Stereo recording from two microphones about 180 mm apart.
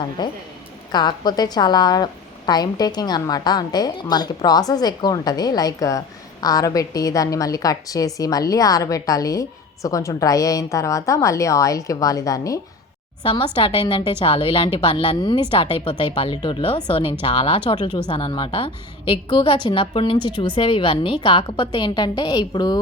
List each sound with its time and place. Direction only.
0.2 s a woman's voice: 25° left (ahead or behind)